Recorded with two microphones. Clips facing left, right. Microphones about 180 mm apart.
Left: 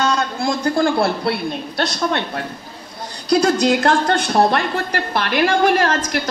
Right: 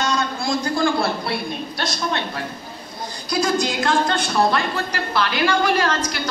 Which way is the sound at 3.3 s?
70° left (ahead or behind).